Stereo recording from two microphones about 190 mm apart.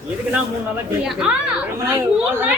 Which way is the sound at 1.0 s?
5° right (ahead or behind).